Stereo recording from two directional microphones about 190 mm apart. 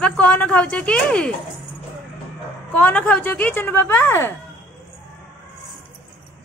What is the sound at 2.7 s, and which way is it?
A woman's voice, 5° left (ahead or behind).